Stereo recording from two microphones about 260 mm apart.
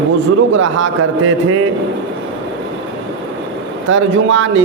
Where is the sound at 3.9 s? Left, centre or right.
Right.